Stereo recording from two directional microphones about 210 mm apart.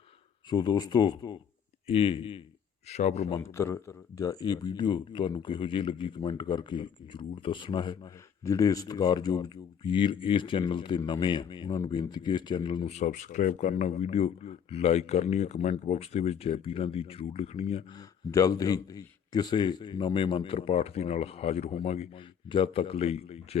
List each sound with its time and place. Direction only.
0.5 s speech: 20° left (ahead or behind)
3.2 s speech: 15° left (ahead or behind)
18.3 s speech: 15° left (ahead or behind)